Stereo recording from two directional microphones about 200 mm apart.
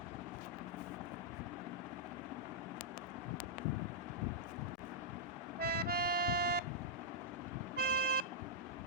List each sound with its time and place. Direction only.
5.5 s music: 50° right (ahead or behind)
7.8 s vehicle: 50° right (ahead or behind)